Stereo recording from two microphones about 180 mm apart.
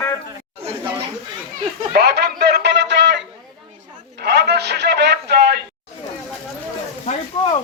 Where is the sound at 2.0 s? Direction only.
65° right (ahead or behind).